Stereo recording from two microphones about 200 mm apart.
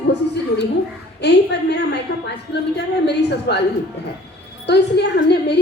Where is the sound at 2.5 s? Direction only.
60° left (ahead or behind).